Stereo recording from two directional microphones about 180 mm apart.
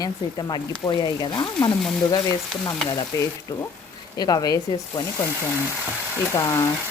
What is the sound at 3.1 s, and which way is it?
Speech, 20° left (ahead or behind).